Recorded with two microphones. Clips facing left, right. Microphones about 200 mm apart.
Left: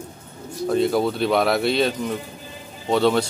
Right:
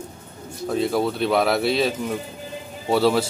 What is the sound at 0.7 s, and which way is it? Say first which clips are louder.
Speech: left 2 dB; centre (ahead or behind).